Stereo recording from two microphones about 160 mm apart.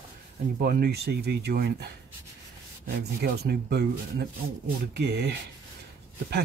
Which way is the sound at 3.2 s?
90° right.